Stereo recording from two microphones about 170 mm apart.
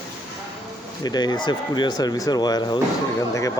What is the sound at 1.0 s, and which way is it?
Speech, 25° left (ahead or behind).